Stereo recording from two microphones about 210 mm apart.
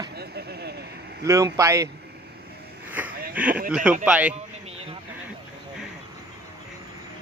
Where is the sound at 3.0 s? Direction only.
5° right (ahead or behind).